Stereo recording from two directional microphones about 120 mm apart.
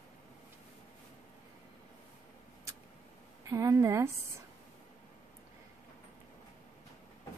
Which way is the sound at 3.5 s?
25° right (ahead or behind).